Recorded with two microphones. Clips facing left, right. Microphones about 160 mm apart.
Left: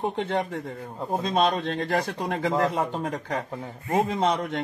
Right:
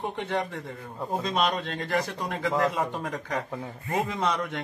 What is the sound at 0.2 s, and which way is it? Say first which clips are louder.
Speech: left 3 dB; 25° left (ahead or behind).